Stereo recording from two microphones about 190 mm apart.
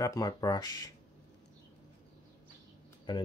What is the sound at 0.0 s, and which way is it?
Speech, 20° left (ahead or behind).